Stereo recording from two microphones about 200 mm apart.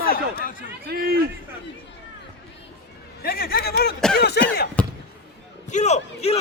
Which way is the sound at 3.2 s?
50° left (ahead or behind).